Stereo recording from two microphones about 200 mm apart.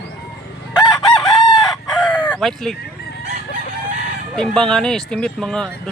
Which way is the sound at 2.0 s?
5° left (ahead or behind).